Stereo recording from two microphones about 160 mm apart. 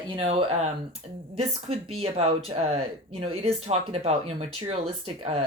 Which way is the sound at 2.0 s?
40° right (ahead or behind).